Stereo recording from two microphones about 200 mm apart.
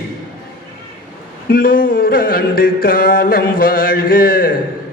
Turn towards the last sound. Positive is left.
turn(degrees=45)  # may be behind; listen again after turning